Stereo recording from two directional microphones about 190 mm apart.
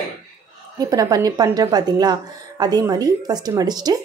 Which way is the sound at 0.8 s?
20° right (ahead or behind).